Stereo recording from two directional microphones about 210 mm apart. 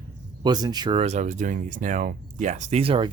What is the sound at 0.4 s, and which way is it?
Speech, 20° right (ahead or behind).